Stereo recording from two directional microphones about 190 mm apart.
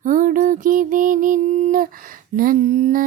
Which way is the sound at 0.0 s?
45° right (ahead or behind).